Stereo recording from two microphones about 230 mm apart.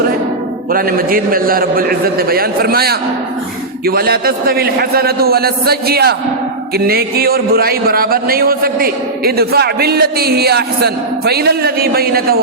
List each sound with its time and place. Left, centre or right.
0.7 s a man's voice: right